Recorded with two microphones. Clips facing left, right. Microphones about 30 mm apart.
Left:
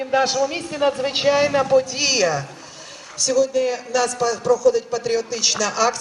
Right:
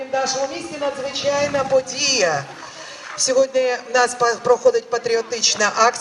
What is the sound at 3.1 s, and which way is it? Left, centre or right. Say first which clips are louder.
A man's voice: right 2 dB; centre.